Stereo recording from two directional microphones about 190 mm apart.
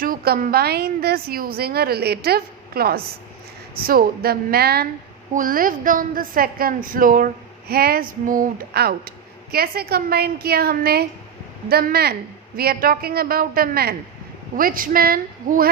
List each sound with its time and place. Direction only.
0.0 s a woman's voice: 50° right (ahead or behind)